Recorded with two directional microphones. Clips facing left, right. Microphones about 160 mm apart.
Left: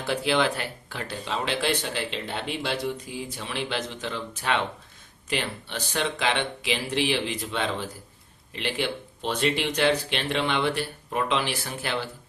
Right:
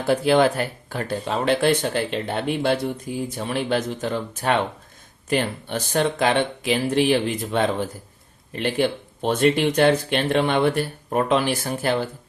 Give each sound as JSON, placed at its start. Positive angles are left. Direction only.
{"t": 0.0, "sound": "speech", "side_deg": -45}